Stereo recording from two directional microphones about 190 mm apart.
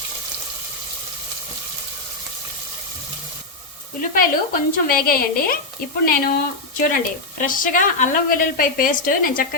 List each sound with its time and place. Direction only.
4.1 s a woman's voice: 50° left (ahead or behind)